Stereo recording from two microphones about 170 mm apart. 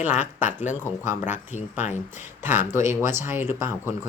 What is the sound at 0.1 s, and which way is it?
Speech, 45° left (ahead or behind).